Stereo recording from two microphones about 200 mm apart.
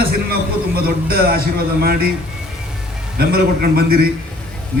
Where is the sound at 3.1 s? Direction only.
50° right (ahead or behind).